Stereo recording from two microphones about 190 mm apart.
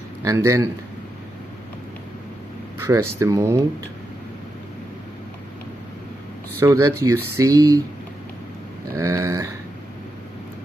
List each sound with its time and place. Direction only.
0.2 s speech: 15° right (ahead or behind)
2.8 s speech: 15° right (ahead or behind)
6.6 s speech: 15° right (ahead or behind)
8.9 s speech: 15° right (ahead or behind)